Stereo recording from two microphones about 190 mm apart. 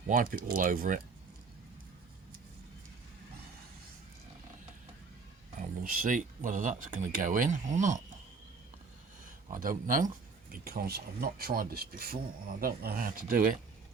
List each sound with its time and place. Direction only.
0.1 s speech: 45° right (ahead or behind)
5.5 s speech: 45° right (ahead or behind)
9.2 s speech: 45° right (ahead or behind)